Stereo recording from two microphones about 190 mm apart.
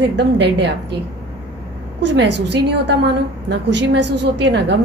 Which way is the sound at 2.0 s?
70° right (ahead or behind).